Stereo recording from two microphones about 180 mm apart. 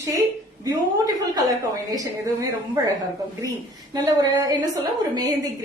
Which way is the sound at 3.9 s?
20° right (ahead or behind).